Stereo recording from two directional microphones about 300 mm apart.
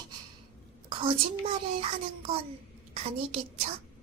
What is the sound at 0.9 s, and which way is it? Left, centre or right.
Speech, centre.